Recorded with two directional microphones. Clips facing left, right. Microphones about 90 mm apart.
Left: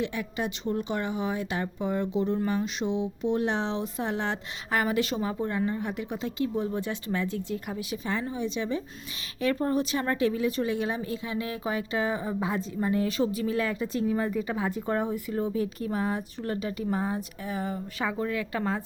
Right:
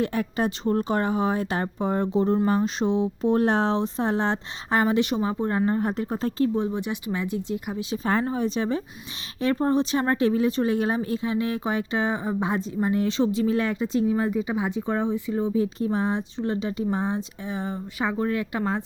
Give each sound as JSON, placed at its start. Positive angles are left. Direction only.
{"t": 0.0, "sound": "speech", "side_deg": -45}
{"t": 6.6, "sound": "speech", "side_deg": -20}
{"t": 8.0, "sound": "speech", "side_deg": -50}